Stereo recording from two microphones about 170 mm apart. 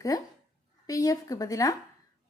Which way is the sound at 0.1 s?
20° left (ahead or behind).